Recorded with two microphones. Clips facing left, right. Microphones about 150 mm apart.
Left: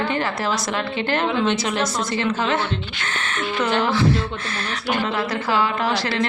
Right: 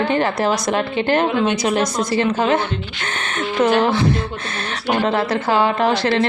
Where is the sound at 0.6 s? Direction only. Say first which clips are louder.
Right 5 dB; 50° right (ahead or behind).